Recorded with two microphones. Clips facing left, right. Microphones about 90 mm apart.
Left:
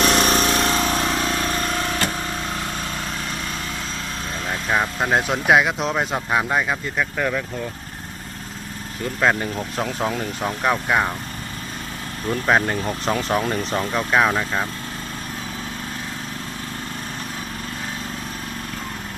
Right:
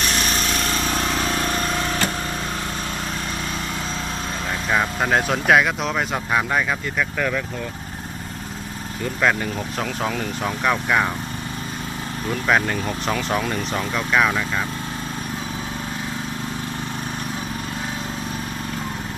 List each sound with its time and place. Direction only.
0.0 s a sound: 65° left (ahead or behind)
0.6 s a sound: 20° left (ahead or behind)
0.9 s vehicle: 5° left (ahead or behind)
4.7 s vehicle: 5° left (ahead or behind)
5.5 s speech: 20° left (ahead or behind)
9.8 s speech: 20° left (ahead or behind)
12.3 s speech: 30° left (ahead or behind)